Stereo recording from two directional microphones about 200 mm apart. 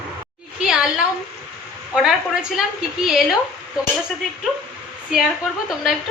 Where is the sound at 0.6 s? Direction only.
5° right (ahead or behind).